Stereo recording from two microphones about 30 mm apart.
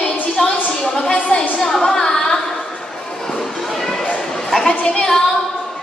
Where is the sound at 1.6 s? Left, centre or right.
Centre.